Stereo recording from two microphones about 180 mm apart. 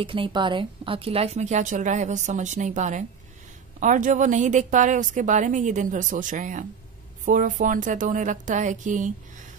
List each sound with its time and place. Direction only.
0.0 s a woman's voice: 30° right (ahead or behind); by 9.1 s 45° right (ahead or behind)